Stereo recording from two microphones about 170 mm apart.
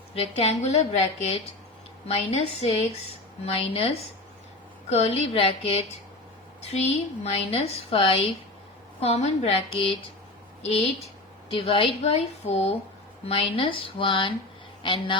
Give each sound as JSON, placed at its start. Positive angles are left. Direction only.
{"t": 0.1, "sound": "a woman's voice", "side_deg": 35}
{"t": 7.3, "sound": "a woman's voice", "side_deg": 35}